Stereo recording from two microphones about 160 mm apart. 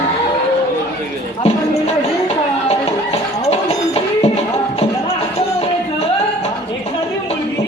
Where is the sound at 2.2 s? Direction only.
40° left (ahead or behind).